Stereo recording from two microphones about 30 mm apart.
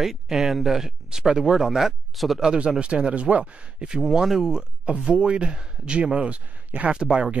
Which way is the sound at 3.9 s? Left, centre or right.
Centre.